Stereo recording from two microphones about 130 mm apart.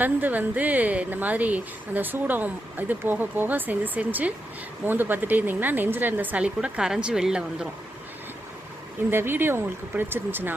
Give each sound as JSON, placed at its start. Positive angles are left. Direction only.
{"t": 0.0, "sound": "a woman's voice", "side_deg": -15}
{"t": 9.0, "sound": "a woman's voice", "side_deg": -15}